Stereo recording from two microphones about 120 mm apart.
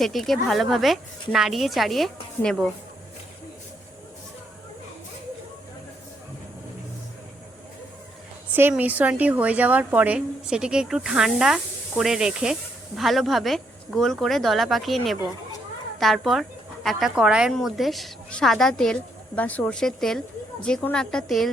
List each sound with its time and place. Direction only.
0.0 s speech: centre (ahead or behind)
8.7 s a woman's voice: 15° right (ahead or behind)